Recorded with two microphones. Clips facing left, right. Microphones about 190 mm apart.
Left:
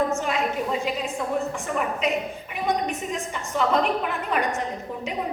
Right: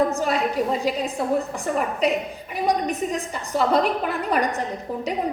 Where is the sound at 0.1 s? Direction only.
35° right (ahead or behind).